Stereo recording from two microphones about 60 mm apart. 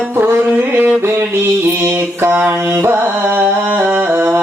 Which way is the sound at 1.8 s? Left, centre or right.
Right.